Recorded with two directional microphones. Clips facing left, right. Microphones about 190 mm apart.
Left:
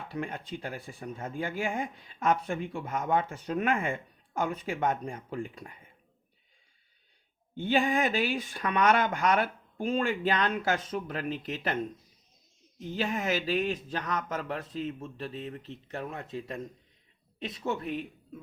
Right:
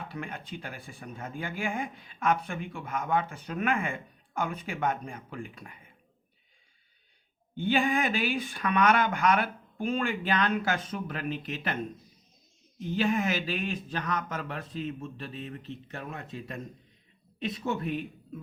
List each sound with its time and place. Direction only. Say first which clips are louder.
0.1 s speech: left 3 dB; 30° left (ahead or behind)
7.5 s speech: even; 30° left (ahead or behind)
8.0 s speech: left 1 dB; 35° left (ahead or behind)
8.9 s speech: left 1 dB; 40° left (ahead or behind)
12.9 s speech: right 3 dB; 30° left (ahead or behind)